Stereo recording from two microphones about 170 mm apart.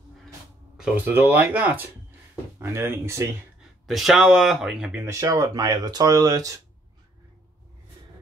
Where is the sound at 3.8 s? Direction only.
Centre (ahead or behind).